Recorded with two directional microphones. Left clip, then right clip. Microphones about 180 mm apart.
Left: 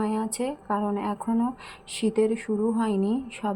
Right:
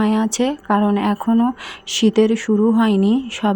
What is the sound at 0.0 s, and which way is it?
A woman's voice, 35° right (ahead or behind).